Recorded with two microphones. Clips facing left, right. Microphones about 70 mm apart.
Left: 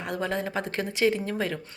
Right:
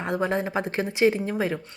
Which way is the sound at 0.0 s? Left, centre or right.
Right.